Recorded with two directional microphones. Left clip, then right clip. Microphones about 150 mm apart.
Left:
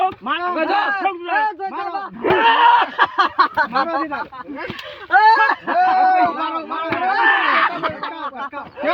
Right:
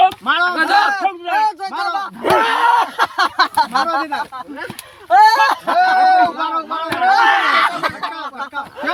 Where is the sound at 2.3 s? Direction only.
45° right (ahead or behind).